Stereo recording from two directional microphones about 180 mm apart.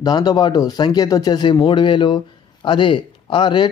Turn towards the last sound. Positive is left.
turn(degrees=25)  # may be behind; listen again after turning